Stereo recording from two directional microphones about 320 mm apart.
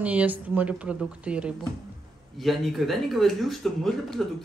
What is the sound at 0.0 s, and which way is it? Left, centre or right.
Speech, centre.